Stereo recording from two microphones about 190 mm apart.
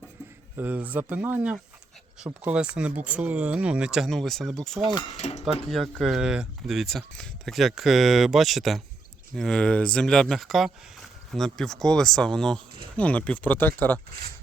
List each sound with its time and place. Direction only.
0.5 s speech: 10° right (ahead or behind)
5.1 s speech: 35° left (ahead or behind)
5.7 s speech: centre (ahead or behind)